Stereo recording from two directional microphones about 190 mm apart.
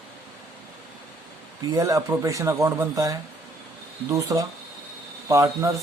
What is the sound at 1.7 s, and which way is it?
Speech, 15° right (ahead or behind).